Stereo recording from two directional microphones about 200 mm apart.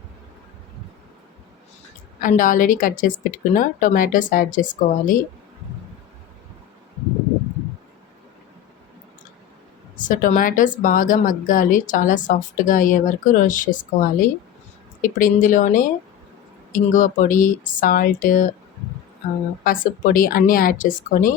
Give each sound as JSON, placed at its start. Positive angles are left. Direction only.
{"t": 2.2, "sound": "a woman's voice", "side_deg": 40}
{"t": 10.0, "sound": "a woman's voice", "side_deg": 40}
{"t": 19.6, "sound": "speech", "side_deg": 45}